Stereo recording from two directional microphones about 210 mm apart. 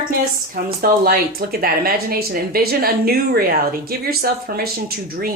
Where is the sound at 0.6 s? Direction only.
45° right (ahead or behind).